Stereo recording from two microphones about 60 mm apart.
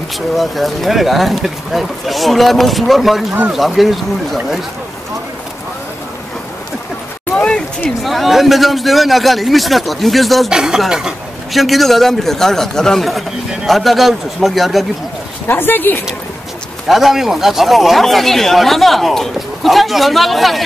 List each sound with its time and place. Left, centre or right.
0.4 s speech: centre
7.3 s a sound: centre
8.0 s speech: centre
10.5 s speech: centre
15.4 s speech: left
16.8 s speech: centre